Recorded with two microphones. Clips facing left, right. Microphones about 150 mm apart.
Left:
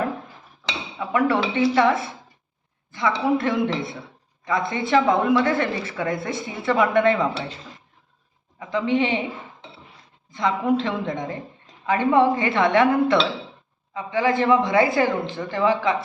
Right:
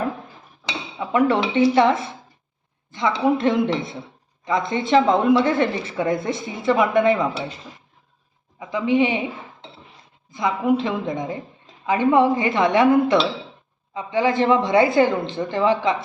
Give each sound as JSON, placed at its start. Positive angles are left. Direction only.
{"t": 0.6, "sound": "dishes", "side_deg": -20}
{"t": 2.9, "sound": "speech", "side_deg": -20}
{"t": 8.5, "sound": "speech", "side_deg": -10}
{"t": 10.3, "sound": "speech", "side_deg": -10}